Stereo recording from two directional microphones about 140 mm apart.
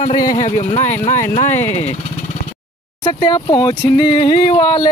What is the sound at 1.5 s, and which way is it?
Speech, 15° left (ahead or behind).